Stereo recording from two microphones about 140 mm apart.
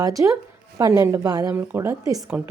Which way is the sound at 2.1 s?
10° right (ahead or behind).